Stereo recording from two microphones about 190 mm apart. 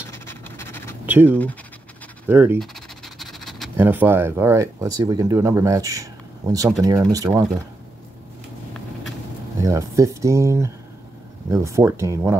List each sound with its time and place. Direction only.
0.0 s a sound: 15° left (ahead or behind)
1.0 s speech: 10° right (ahead or behind)
2.6 s scratch: centre (ahead or behind)
3.7 s speech: 10° right (ahead or behind)
9.6 s speech: 15° right (ahead or behind)